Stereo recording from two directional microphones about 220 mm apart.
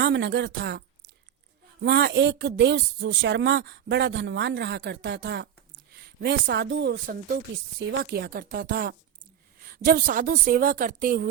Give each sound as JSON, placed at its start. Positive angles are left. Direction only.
{"t": 0.0, "sound": "a woman's voice", "side_deg": -55}